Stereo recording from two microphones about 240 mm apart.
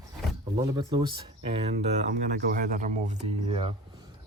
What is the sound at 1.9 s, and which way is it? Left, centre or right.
Speech, right.